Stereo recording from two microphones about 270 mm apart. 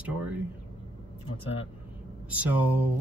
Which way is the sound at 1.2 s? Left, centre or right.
Left.